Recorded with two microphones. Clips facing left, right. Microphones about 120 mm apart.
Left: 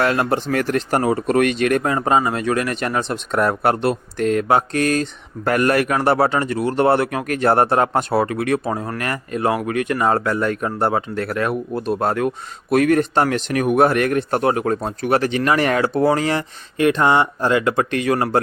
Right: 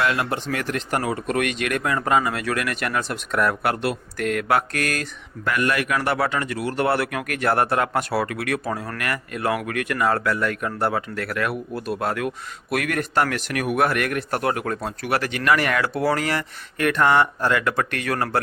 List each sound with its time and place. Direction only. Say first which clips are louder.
0.0 s speech: left 5 dB; 40° left (ahead or behind)
5.5 s speech: left 5 dB; 45° left (ahead or behind); by 18.3 s 20° left (ahead or behind)